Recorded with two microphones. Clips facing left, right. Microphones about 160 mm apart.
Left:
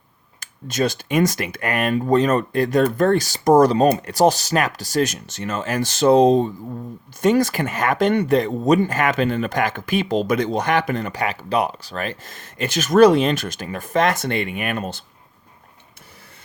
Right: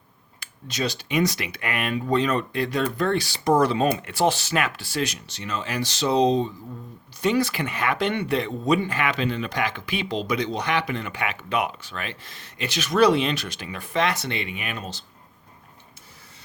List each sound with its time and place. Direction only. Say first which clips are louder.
0.3 s speech: left 7 dB; 50° left (ahead or behind)